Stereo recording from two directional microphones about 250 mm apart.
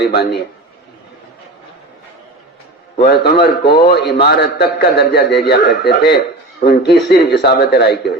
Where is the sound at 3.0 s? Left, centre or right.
Left.